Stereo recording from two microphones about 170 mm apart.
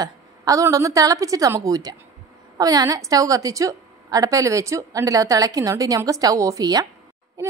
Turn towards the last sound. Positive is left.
turn(degrees=-20)  # may be behind; listen again after turning